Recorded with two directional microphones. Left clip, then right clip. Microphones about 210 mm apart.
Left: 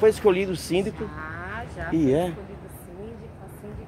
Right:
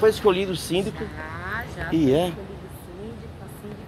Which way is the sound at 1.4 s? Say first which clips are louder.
Right 6 dB; 40° left (ahead or behind).